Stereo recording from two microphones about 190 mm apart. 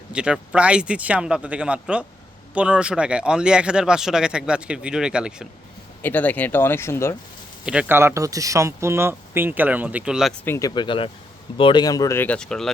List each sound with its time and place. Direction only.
0.1 s speech: 5° right (ahead or behind)
6.0 s speech: 10° left (ahead or behind)
7.6 s speech: 5° right (ahead or behind)
10.4 s speech: 10° left (ahead or behind)
10.8 s speech: 25° left (ahead or behind); by 12.7 s 5° left (ahead or behind)